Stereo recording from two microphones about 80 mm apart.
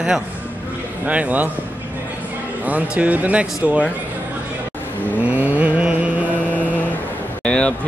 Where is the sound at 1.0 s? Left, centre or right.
Centre.